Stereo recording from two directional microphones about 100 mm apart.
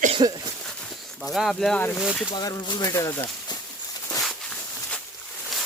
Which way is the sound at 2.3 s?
45° left (ahead or behind).